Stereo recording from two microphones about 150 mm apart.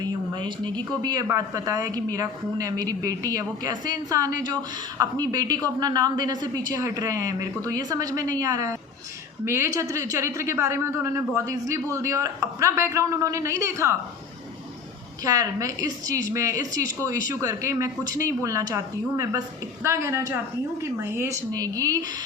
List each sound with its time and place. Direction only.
0.0 s a woman's voice: 30° right (ahead or behind)
15.2 s a woman's voice: 25° right (ahead or behind)